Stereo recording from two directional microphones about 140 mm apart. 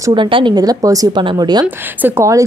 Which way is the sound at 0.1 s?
35° right (ahead or behind).